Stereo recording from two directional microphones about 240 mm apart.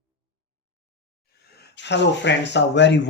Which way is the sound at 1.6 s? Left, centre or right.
Left.